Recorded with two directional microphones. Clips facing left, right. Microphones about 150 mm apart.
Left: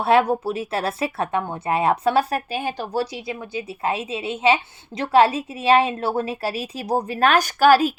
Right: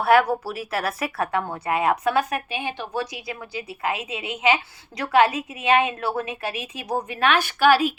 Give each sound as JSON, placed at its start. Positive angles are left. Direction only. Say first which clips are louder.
{"t": 0.0, "sound": "a woman's voice", "louder": "left 1 dB", "side_deg": 25}